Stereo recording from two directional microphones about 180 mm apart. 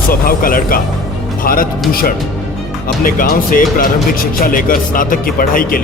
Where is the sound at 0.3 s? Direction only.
50° left (ahead or behind).